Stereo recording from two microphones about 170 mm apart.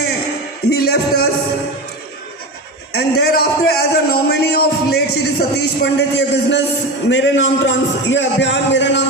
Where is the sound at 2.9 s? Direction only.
70° left (ahead or behind).